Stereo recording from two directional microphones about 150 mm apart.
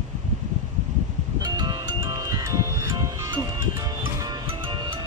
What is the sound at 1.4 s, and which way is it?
Music, 25° right (ahead or behind).